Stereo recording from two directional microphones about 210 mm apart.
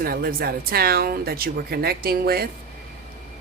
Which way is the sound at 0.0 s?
45° right (ahead or behind).